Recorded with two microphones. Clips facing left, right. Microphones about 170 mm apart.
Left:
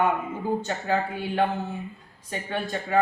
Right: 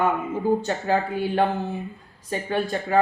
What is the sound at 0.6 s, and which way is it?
Speech, 35° right (ahead or behind).